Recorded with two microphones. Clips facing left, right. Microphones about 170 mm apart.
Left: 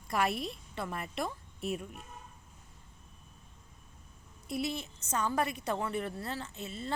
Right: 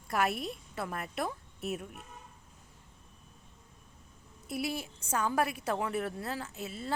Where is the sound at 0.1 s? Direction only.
Centre (ahead or behind).